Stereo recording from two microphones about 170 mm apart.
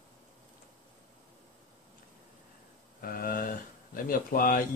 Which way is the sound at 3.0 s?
60° left (ahead or behind).